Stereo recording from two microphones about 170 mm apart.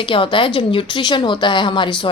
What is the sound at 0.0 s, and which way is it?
Speech, 30° left (ahead or behind).